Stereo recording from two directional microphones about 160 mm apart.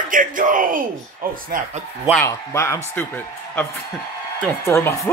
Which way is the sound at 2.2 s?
15° left (ahead or behind).